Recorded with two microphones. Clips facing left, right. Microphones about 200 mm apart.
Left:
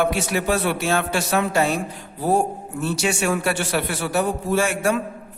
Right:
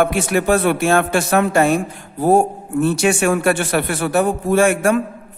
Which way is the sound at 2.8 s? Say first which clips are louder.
Right 6 dB; 55° right (ahead or behind).